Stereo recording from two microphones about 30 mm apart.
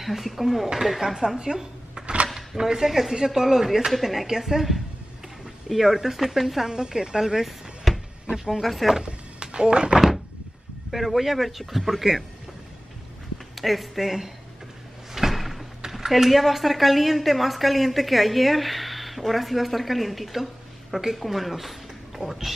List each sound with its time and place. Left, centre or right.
0.0 s a woman's voice: centre
1.0 s speech: centre
1.4 s a sound: centre
2.3 s speech: centre
2.9 s speech: centre
3.9 s a woman's voice: centre
4.3 s speech: centre
6.7 s a woman's voice: right; by 8.9 s centre
9.0 s speech: right
10.9 s a woman's voice: centre
13.6 s a woman's voice: centre
15.1 s slam: centre
15.8 s a sound: centre
16.1 s a woman's voice: centre